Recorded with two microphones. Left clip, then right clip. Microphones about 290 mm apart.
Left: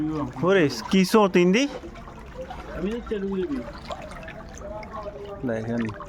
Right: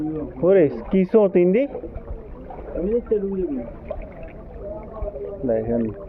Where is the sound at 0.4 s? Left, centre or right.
Left.